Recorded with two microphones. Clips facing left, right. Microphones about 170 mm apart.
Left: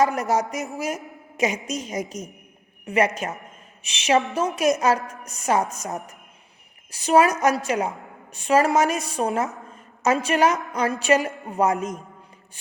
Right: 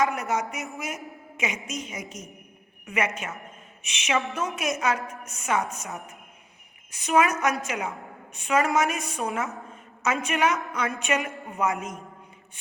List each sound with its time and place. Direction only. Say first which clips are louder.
0.0 s a woman's voice: left 5 dB; 40° left (ahead or behind)